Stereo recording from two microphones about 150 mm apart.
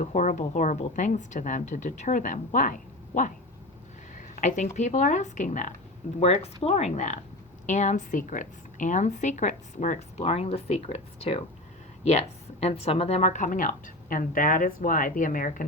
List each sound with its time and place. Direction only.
0.0 s a woman's voice: 50° left (ahead or behind)
4.1 s a woman's voice: 60° left (ahead or behind)
6.1 s a woman's voice: 45° left (ahead or behind); by 15.6 s 65° left (ahead or behind)